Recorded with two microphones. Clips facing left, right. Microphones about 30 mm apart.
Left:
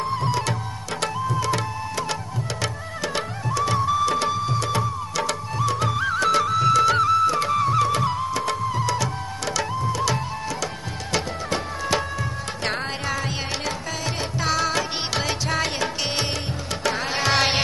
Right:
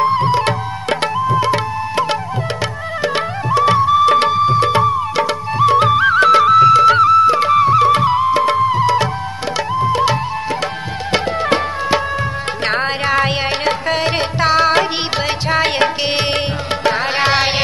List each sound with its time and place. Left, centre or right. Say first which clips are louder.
0.0 s music: right 10 dB; right
1.1 s music: right 8 dB; right
7.2 s music: right 9 dB; right
12.6 s music: right 9 dB; right
16.8 s music: right 8 dB; right
17.3 s music: right 2 dB; centre